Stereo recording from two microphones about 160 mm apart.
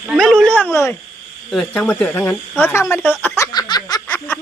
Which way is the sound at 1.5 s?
5° left (ahead or behind).